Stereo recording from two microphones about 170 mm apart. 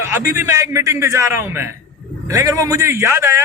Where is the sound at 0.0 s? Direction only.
15° right (ahead or behind).